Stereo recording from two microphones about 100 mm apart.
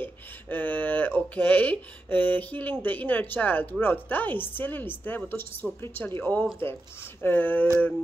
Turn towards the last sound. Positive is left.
turn(degrees=20)  # may be behind; listen again after turning